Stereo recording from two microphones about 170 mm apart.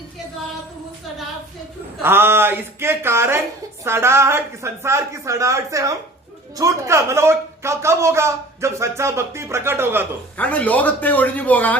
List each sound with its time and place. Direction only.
2.0 s speech: 15° right (ahead or behind)
10.3 s speech: 10° left (ahead or behind)